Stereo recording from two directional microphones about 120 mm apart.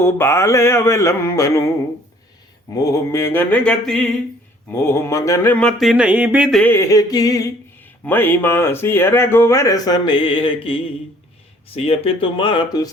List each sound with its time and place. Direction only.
0.0 s speech: 20° left (ahead or behind)
2.7 s mantra: 25° left (ahead or behind); by 4.1 s 5° left (ahead or behind)
4.7 s speech: 20° left (ahead or behind)
5.7 s a sound: centre (ahead or behind)
6.5 s mantra: 10° left (ahead or behind)
6.7 s speech: 30° left (ahead or behind)
8.0 s speech: 15° left (ahead or behind); by 12.9 s 40° left (ahead or behind)